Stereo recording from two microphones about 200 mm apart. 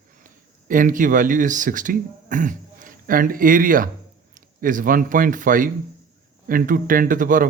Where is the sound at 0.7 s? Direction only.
45° right (ahead or behind).